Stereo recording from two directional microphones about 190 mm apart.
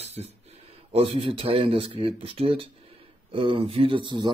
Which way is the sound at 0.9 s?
30° right (ahead or behind).